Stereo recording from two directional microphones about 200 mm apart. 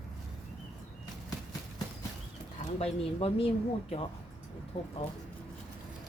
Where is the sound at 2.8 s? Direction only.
30° left (ahead or behind).